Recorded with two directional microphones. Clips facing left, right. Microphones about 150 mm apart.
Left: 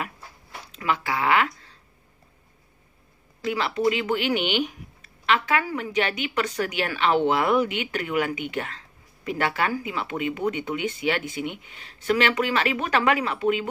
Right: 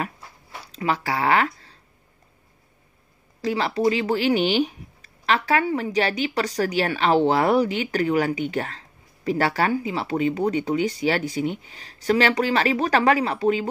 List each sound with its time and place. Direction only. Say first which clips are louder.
0.7 s speech: right 2 dB; 35° right (ahead or behind)
3.4 s speech: right 2 dB; 35° right (ahead or behind)